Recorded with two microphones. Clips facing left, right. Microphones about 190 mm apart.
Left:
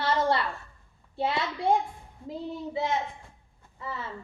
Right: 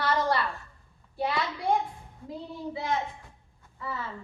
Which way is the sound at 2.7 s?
25° left (ahead or behind).